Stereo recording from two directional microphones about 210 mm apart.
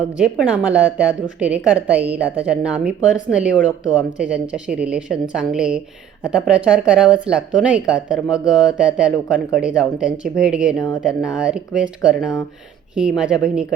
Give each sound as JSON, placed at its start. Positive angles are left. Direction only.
{"t": 0.1, "sound": "a woman's voice", "side_deg": -5}